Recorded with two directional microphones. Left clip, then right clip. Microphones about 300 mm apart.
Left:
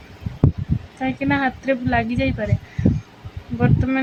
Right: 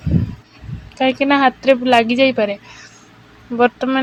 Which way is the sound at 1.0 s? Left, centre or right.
Centre.